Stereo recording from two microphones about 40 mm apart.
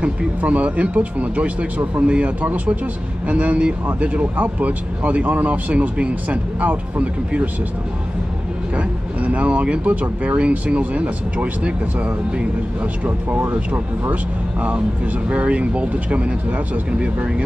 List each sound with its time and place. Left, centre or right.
0.4 s speech: right
8.7 s speech: right
13.0 s speech: right
15.2 s speech: right